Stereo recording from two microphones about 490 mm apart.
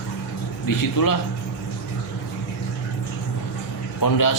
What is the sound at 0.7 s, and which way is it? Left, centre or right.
Speech, left.